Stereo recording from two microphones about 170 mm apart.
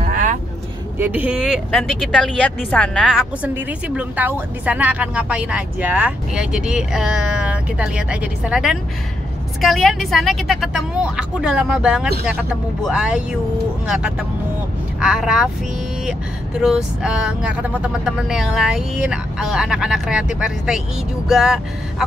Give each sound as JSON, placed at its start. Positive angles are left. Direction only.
{"t": 0.1, "sound": "vehicle", "side_deg": -50}
{"t": 0.9, "sound": "speech", "side_deg": -10}